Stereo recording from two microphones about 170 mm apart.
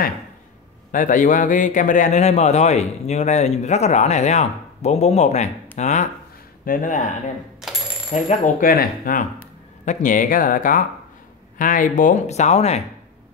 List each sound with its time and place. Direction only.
0.9 s a man's voice: 50° left (ahead or behind)
8.1 s speech: 40° left (ahead or behind)
8.6 s speech: 55° left (ahead or behind); by 12.8 s 40° left (ahead or behind)